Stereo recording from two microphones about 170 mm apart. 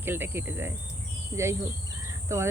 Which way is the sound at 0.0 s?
15° right (ahead or behind).